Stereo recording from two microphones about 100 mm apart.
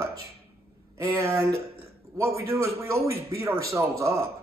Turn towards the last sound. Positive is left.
turn(degrees=-30)  # may be behind; listen again after turning